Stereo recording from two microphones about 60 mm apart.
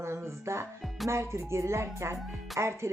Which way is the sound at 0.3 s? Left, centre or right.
Right.